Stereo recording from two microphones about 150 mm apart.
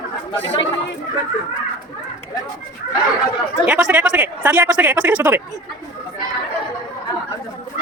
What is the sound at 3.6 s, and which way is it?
Speech, 10° right (ahead or behind).